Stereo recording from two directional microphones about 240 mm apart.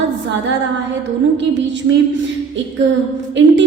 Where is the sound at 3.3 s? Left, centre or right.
Right.